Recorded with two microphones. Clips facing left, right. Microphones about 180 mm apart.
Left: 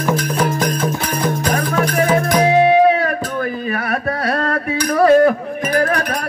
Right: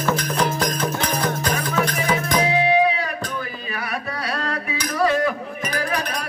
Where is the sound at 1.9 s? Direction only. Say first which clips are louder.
Left 6 dB; 50° left (ahead or behind).